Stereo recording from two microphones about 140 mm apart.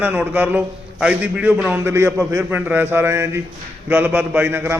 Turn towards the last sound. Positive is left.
turn(degrees=-15)  # may be behind; listen again after turning